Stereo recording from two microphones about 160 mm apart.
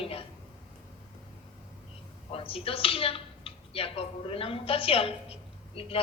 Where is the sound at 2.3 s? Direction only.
35° left (ahead or behind).